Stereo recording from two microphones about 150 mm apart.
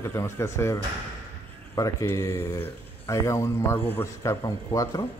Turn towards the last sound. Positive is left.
turn(degrees=20)  # may be behind; listen again after turning